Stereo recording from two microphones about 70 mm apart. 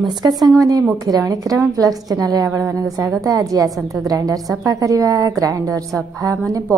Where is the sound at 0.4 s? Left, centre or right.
Right.